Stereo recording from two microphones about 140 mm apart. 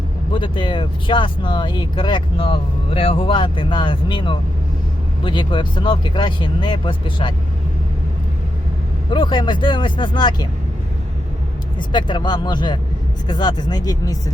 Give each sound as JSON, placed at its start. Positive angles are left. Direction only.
{"t": 0.3, "sound": "speech", "side_deg": 35}
{"t": 9.0, "sound": "speech", "side_deg": 35}
{"t": 11.8, "sound": "speech", "side_deg": 35}